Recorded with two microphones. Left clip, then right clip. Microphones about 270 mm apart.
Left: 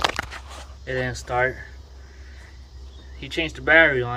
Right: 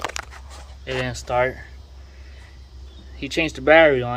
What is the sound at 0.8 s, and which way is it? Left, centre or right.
Speech, centre.